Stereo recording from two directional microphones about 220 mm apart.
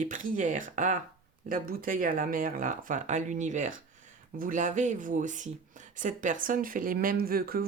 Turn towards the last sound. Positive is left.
turn(degrees=-40)  # may be behind; listen again after turning